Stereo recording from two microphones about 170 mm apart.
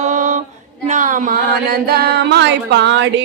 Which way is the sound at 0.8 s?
50° right (ahead or behind).